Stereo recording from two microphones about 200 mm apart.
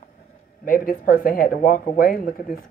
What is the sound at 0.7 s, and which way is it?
Speech, 45° left (ahead or behind).